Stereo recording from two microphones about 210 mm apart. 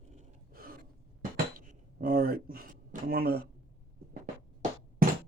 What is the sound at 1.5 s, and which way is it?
Speech, 40° right (ahead or behind).